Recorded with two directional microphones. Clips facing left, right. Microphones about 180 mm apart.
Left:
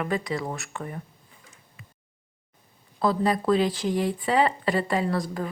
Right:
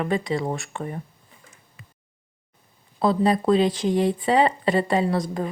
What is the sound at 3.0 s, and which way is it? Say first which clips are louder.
Speech: right 3 dB; 25° right (ahead or behind).